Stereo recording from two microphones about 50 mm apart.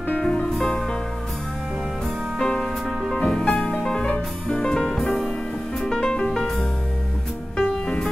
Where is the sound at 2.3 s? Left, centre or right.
Centre.